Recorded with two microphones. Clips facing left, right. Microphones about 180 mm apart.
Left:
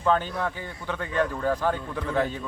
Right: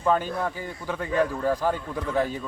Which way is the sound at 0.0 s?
10° right (ahead or behind).